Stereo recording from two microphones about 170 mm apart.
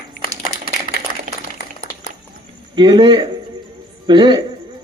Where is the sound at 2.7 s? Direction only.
25° right (ahead or behind).